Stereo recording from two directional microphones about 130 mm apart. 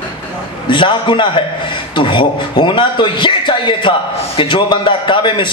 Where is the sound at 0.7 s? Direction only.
40° left (ahead or behind).